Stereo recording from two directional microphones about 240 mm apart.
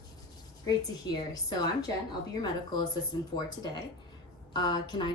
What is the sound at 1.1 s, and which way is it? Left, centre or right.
Speech, centre.